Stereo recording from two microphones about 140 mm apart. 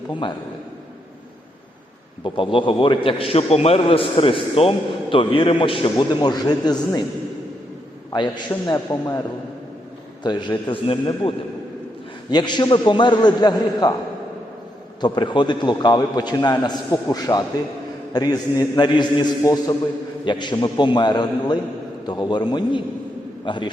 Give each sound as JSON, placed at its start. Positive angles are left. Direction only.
{"t": 0.1, "sound": "a man's voice", "side_deg": 35}
{"t": 2.2, "sound": "a man's voice", "side_deg": 40}
{"t": 8.6, "sound": "a man's voice", "side_deg": 25}
{"t": 10.2, "sound": "a man's voice", "side_deg": 30}
{"t": 15.0, "sound": "a man's voice", "side_deg": 30}